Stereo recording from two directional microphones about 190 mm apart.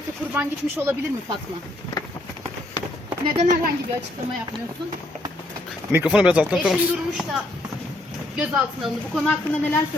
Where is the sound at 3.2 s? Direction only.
25° right (ahead or behind).